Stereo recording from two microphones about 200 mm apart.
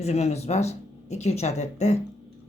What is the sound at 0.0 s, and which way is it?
Speech, 35° left (ahead or behind).